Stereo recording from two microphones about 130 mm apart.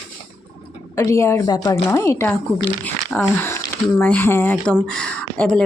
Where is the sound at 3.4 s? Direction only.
15° left (ahead or behind).